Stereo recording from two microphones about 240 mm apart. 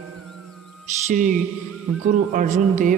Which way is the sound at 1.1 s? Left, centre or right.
Right.